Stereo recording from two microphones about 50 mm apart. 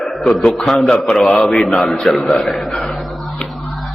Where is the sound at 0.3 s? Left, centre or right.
Centre.